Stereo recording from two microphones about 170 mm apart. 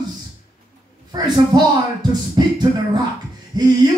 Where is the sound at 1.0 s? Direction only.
25° right (ahead or behind).